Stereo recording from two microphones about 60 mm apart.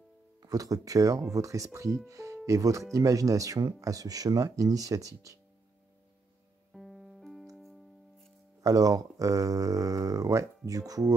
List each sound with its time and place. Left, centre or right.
0.4 s speech: right
6.7 s music: centre
8.5 s speech: right